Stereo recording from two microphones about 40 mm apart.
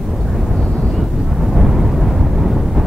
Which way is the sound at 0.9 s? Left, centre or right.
Centre.